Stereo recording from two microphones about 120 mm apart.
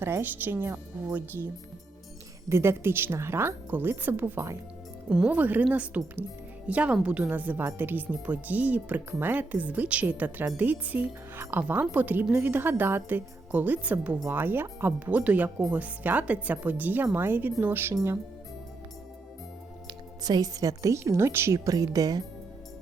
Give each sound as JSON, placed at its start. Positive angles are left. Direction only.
{"t": 0.0, "sound": "a woman's voice", "side_deg": -20}
{"t": 2.5, "sound": "a woman's voice", "side_deg": -20}
{"t": 20.2, "sound": "a woman's voice", "side_deg": -30}